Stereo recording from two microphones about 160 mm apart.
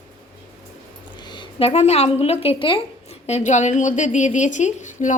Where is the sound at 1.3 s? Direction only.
35° left (ahead or behind).